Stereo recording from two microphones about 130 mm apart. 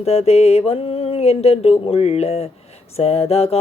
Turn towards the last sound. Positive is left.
turn(degrees=50)  # may be behind; listen again after turning